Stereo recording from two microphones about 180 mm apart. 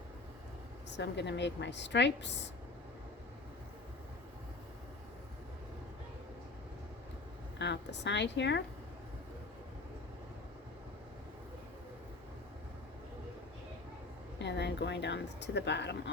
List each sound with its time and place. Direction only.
0.9 s a woman's voice: 75° left (ahead or behind)
7.6 s a woman's voice: 75° left (ahead or behind)
14.3 s speech: 75° left (ahead or behind)